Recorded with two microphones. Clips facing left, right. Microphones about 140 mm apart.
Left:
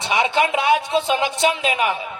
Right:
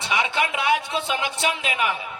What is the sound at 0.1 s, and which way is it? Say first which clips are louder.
A man's voice: left 5 dB; 25° left (ahead or behind).